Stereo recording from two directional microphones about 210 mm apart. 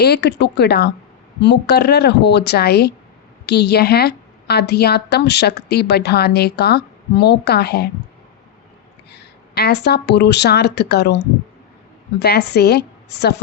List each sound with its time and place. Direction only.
0.0 s a woman's voice: 50° left (ahead or behind)
9.1 s speech: 50° left (ahead or behind)
12.2 s a woman's voice: 50° left (ahead or behind)